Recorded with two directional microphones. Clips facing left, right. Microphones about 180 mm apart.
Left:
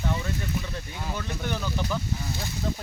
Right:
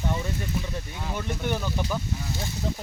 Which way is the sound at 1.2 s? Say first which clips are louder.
Right 4 dB; 15° right (ahead or behind).